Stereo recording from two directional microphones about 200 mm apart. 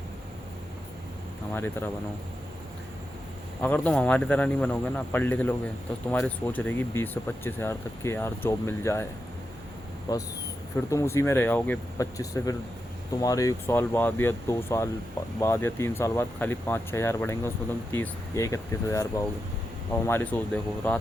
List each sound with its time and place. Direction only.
1.5 s speech: 10° left (ahead or behind)
3.6 s speech: 5° left (ahead or behind)
10.1 s speech: 20° left (ahead or behind)